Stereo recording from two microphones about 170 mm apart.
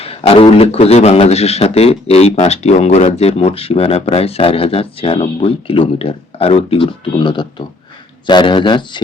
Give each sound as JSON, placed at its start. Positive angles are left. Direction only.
{"t": 0.0, "sound": "a man's voice", "side_deg": 35}